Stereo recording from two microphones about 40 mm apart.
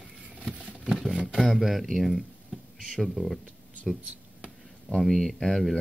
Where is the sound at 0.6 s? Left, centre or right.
Right.